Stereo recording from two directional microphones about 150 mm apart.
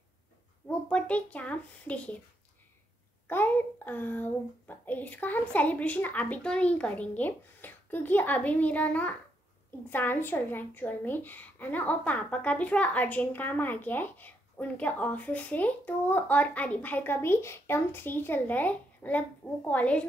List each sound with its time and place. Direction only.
0.7 s a woman's voice: 10° left (ahead or behind)
3.3 s a woman's voice: 15° left (ahead or behind)